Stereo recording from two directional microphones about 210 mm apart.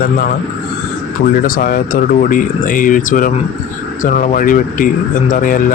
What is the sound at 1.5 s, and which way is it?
Speech, 40° left (ahead or behind).